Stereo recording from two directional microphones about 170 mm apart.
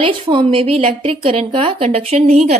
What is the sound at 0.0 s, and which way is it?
A woman's voice, 30° right (ahead or behind).